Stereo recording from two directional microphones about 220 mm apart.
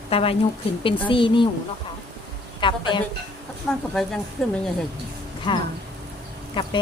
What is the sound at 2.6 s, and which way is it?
Speech, 20° left (ahead or behind).